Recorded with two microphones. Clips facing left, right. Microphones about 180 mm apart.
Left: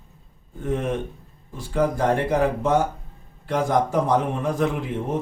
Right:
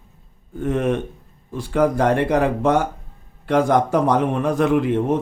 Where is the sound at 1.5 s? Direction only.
75° right (ahead or behind).